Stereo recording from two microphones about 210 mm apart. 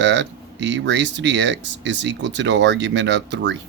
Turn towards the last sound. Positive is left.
turn(degrees=-60)  # may be behind; listen again after turning